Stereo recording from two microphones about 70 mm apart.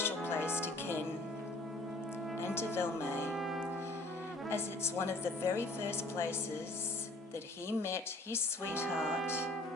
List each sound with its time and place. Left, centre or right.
0.0 s music: left
2.6 s speech: left
3.3 s music: centre
4.4 s speech: left
7.7 s speech: left
9.0 s speech: centre
9.2 s speech: left